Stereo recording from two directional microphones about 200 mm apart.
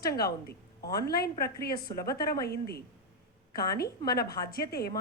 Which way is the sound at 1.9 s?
15° left (ahead or behind).